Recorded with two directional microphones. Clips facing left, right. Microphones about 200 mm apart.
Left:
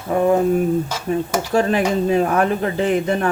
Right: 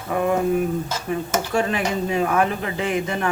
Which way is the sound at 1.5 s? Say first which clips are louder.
Left 6 dB; 35° left (ahead or behind).